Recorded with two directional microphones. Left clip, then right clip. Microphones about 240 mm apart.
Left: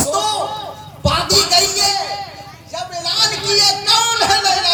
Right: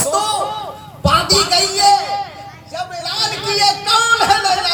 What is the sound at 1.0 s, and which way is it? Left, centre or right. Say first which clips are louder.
Speech: right 2 dB; right.